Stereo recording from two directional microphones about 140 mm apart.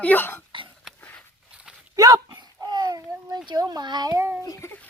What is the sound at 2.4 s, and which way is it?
A child's voice, 30° right (ahead or behind).